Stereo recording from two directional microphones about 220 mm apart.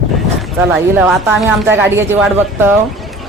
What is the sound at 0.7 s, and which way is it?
Speech, centre (ahead or behind).